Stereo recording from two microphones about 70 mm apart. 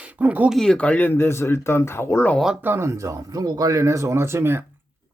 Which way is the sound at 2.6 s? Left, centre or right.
Right.